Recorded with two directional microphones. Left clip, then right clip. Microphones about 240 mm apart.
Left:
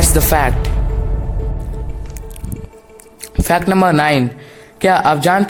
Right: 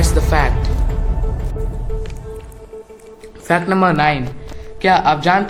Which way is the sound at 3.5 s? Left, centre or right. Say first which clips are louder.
Left 2 dB; left.